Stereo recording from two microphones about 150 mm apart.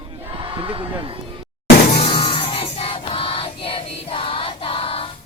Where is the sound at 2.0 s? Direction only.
35° left (ahead or behind).